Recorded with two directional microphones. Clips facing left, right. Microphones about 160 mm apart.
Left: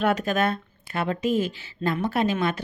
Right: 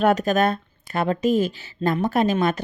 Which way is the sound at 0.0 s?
40° right (ahead or behind).